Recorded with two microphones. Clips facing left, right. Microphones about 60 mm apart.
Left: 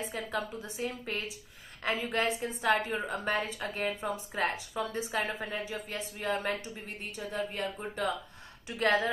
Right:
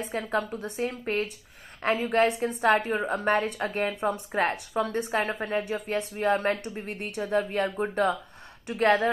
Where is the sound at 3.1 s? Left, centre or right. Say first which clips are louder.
Right 8 dB; right.